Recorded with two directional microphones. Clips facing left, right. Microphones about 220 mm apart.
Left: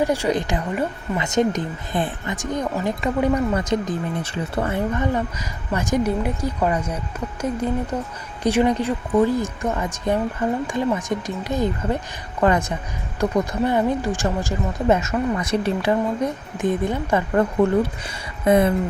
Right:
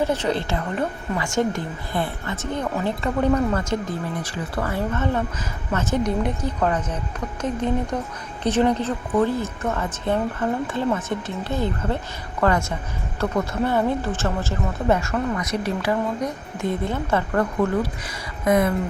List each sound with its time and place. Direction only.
0.0 s a woman's voice: 10° left (ahead or behind)
16.6 s a woman's voice: 15° left (ahead or behind)